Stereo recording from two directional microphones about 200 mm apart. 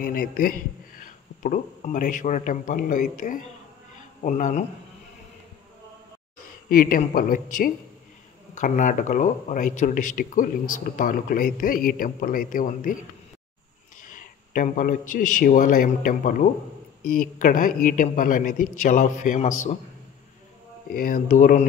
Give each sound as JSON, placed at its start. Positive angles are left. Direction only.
{"t": 0.0, "sound": "speech", "side_deg": 45}
{"t": 6.7, "sound": "a man's voice", "side_deg": 45}
{"t": 14.1, "sound": "a man's voice", "side_deg": 40}
{"t": 20.9, "sound": "a man's voice", "side_deg": 45}